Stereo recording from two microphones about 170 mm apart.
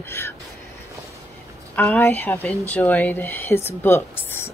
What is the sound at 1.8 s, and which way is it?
Speech, 10° left (ahead or behind).